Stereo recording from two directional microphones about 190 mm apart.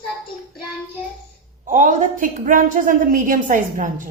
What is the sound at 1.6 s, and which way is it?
A woman's voice, 45° right (ahead or behind).